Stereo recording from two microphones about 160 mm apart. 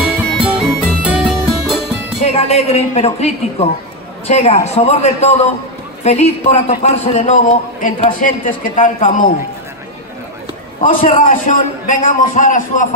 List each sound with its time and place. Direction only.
0.4 s music: 5° right (ahead or behind)
2.2 s a man's voice: 40° left (ahead or behind)
10.8 s a man's voice: 50° left (ahead or behind)